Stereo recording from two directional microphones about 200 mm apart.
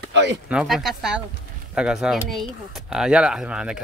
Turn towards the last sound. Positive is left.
turn(degrees=-5)  # may be behind; listen again after turning